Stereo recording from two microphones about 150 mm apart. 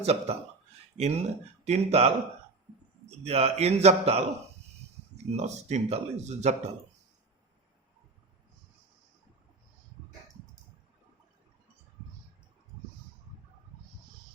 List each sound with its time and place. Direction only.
0.0 s speech: 45° right (ahead or behind)
3.2 s speech: 45° right (ahead or behind)